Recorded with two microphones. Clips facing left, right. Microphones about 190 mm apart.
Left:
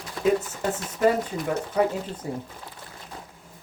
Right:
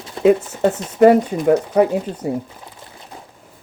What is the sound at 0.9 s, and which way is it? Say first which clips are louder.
Speech: right 11 dB; 70° right (ahead or behind).